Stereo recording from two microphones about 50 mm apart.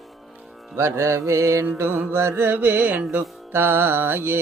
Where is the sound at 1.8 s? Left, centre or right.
Right.